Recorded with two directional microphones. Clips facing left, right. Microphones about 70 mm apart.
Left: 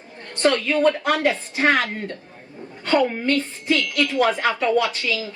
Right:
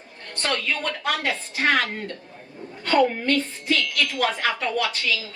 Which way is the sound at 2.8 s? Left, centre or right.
Left.